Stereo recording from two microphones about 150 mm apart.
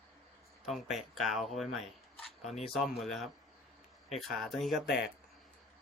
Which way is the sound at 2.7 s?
Centre (ahead or behind).